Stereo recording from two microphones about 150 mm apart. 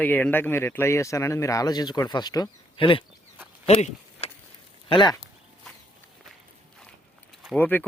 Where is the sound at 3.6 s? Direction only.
45° left (ahead or behind).